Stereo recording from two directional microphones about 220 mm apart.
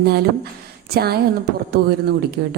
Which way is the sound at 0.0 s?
45° right (ahead or behind).